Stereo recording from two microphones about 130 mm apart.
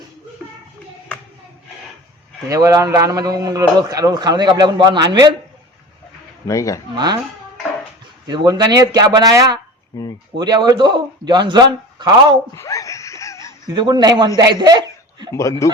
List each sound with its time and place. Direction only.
2.5 s a man's voice: 25° right (ahead or behind)
6.5 s a man's voice: 25° left (ahead or behind)
6.9 s a man's voice: 35° right (ahead or behind)
8.3 s a man's voice: 35° right (ahead or behind)
9.9 s a man's voice: 25° left (ahead or behind)
10.3 s a man's voice: 35° right (ahead or behind)
12.5 s wheeze: 25° left (ahead or behind)
13.7 s a man's voice: 35° right (ahead or behind)
15.4 s a man's voice: 25° left (ahead or behind)